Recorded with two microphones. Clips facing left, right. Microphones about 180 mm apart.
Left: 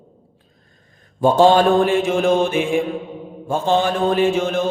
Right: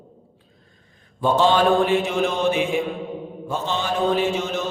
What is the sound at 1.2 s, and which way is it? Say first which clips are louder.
A man's voice: left 5 dB; 45° left (ahead or behind).